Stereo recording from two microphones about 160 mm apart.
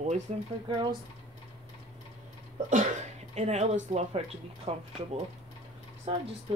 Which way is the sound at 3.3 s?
45° right (ahead or behind).